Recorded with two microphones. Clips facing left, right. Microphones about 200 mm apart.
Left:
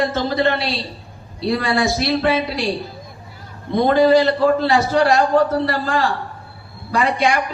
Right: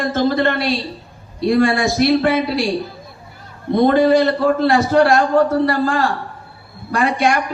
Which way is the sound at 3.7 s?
55° right (ahead or behind).